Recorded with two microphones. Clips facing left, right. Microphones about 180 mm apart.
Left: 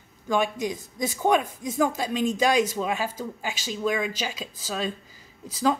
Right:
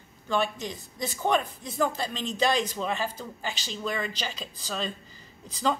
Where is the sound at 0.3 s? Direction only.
10° left (ahead or behind).